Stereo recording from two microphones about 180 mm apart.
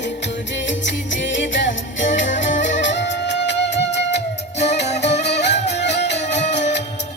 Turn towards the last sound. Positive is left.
turn(degrees=70)  # may be behind; listen again after turning